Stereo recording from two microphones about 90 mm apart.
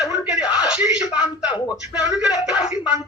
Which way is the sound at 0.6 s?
10° right (ahead or behind).